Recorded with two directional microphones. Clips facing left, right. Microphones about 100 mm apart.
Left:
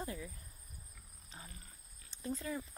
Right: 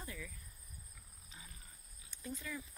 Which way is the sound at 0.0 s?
30° left (ahead or behind).